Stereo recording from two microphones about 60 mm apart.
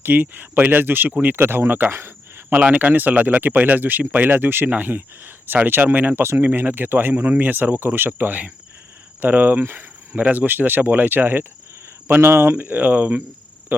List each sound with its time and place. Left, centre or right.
0.0 s speech: right
2.6 s speech: right
12.5 s speech: right